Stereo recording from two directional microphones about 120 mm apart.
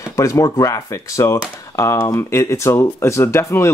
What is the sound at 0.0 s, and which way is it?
Speech, 25° left (ahead or behind).